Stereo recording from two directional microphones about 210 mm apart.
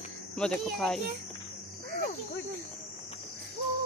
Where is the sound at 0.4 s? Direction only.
Centre (ahead or behind).